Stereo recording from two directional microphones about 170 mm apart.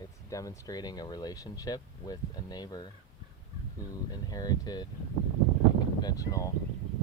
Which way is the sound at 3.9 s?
25° left (ahead or behind).